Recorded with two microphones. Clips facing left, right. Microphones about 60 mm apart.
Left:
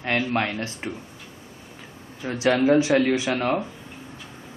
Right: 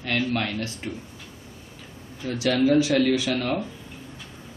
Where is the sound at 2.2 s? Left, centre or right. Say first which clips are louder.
Left 2 dB; left.